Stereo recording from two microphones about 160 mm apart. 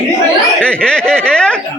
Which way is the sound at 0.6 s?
5° left (ahead or behind).